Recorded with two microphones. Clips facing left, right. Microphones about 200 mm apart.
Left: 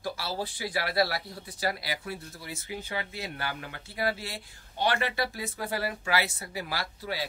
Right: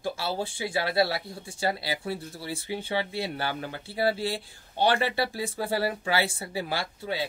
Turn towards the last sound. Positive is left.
turn(degrees=-25)  # may be behind; listen again after turning